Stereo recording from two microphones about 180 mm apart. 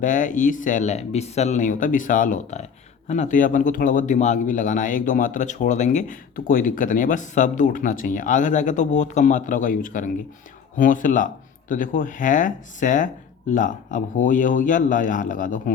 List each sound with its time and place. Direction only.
0.0 s speech: 45° left (ahead or behind)